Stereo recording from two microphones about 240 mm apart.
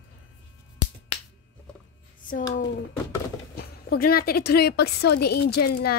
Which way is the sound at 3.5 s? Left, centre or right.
Left.